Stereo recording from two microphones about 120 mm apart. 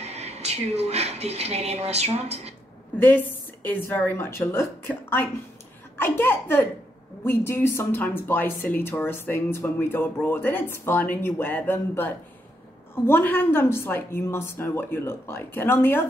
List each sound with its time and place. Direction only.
0.0 s speech: 60° right (ahead or behind)
3.0 s a woman's voice: 15° left (ahead or behind)